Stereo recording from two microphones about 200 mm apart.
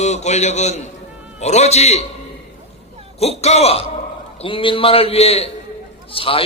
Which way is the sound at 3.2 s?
30° left (ahead or behind).